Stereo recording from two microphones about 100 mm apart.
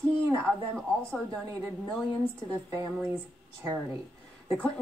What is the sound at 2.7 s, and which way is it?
Speech, 35° right (ahead or behind).